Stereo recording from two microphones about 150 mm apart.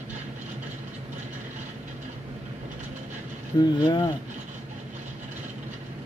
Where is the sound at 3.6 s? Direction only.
30° left (ahead or behind).